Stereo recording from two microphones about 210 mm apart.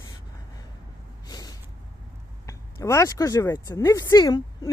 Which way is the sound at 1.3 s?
15° left (ahead or behind).